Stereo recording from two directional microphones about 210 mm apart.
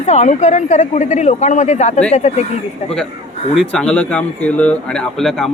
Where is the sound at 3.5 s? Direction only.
Centre (ahead or behind).